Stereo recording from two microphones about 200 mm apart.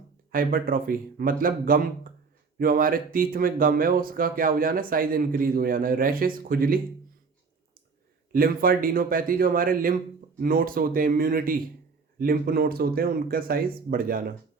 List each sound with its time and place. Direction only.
0.3 s speech: 45° right (ahead or behind)
8.3 s speech: 45° right (ahead or behind)